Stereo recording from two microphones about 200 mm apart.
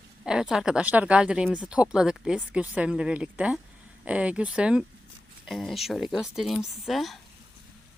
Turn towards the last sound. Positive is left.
turn(degrees=0)  # may be behind; listen again after turning